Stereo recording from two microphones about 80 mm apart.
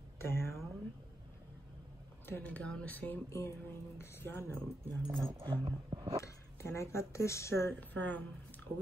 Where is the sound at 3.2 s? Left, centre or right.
Left.